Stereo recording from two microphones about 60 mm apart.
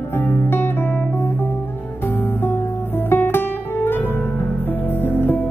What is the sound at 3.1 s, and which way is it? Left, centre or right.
Guitar, left.